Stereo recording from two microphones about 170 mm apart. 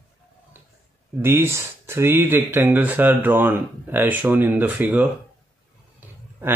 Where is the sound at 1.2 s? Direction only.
15° right (ahead or behind).